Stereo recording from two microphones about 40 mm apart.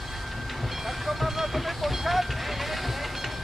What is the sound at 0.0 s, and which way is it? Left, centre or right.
Train, centre.